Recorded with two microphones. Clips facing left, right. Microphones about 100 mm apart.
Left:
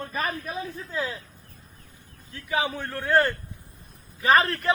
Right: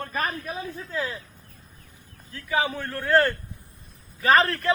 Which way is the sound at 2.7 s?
15° left (ahead or behind).